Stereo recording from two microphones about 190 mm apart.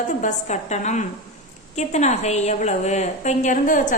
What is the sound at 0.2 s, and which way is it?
A woman's voice, 40° left (ahead or behind).